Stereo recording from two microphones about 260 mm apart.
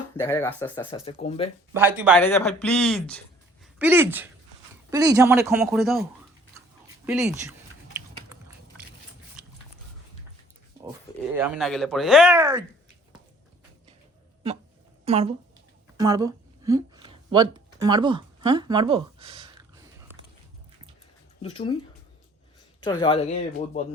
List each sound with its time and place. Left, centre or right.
0.2 s speech: centre
0.9 s speech: left
1.7 s speech: centre
2.1 s speech: centre
3.8 s speech: centre
6.8 s a sound: centre
9.4 s pig: centre
11.3 s speech: centre
15.0 s speech: right
21.4 s speech: left
22.8 s speech: centre